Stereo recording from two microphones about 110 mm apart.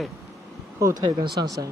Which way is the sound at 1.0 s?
40° right (ahead or behind).